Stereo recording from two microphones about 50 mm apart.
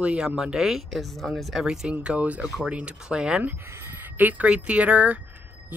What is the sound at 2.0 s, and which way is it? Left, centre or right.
Speech, right.